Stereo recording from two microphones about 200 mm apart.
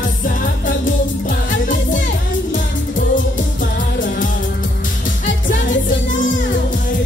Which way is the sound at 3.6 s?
40° left (ahead or behind).